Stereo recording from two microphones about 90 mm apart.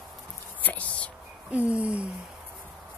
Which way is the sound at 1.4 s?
15° right (ahead or behind).